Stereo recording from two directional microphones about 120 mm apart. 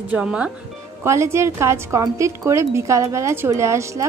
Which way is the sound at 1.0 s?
25° right (ahead or behind).